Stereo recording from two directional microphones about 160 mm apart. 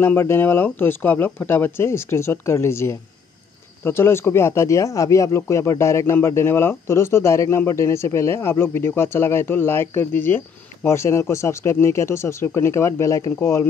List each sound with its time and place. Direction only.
0.0 s speech: 15° left (ahead or behind)